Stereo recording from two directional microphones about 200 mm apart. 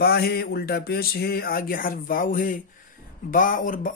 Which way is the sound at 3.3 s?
40° left (ahead or behind).